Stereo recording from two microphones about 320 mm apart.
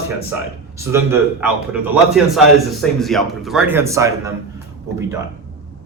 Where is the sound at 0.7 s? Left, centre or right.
Centre.